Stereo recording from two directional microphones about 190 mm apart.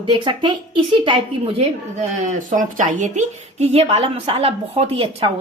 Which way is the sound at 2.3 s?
45° right (ahead or behind).